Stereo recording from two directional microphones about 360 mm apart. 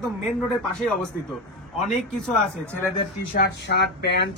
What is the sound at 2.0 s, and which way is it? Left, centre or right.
Speech, centre.